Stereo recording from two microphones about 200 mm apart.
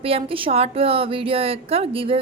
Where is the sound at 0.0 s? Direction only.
30° right (ahead or behind).